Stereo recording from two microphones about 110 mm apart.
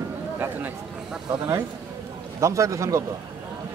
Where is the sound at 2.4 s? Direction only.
30° right (ahead or behind).